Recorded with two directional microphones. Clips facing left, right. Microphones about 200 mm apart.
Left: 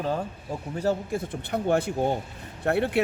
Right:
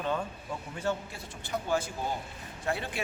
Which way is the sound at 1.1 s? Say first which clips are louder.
Left 8 dB; 55° left (ahead or behind).